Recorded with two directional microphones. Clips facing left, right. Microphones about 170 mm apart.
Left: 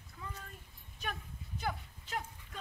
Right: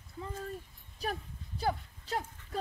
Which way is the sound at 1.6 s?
35° right (ahead or behind).